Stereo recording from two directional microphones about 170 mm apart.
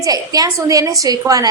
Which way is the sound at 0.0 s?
20° right (ahead or behind).